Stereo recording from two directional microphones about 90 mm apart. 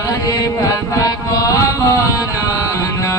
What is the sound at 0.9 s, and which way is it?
Music, 40° left (ahead or behind).